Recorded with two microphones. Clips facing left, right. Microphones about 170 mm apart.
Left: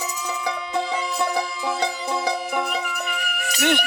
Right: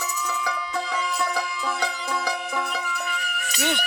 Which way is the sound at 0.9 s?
25° left (ahead or behind).